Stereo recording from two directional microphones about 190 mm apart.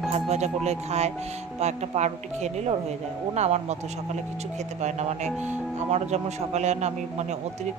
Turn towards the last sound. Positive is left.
turn(degrees=-35)  # may be behind; listen again after turning